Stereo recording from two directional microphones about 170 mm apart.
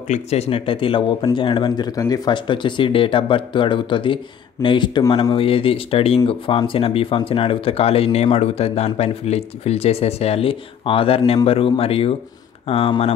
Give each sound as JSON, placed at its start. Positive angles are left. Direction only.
{"t": 0.1, "sound": "speech", "side_deg": 40}